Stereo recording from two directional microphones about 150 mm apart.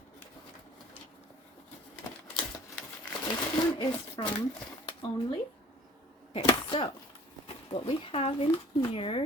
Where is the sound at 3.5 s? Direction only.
30° left (ahead or behind).